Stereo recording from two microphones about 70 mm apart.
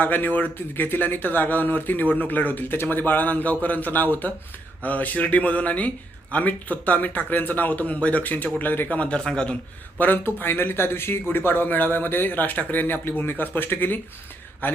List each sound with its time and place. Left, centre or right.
0.0 s a man's voice: left
10.0 s speech: left